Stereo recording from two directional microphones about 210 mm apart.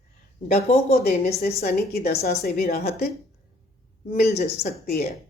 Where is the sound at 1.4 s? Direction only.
45° left (ahead or behind).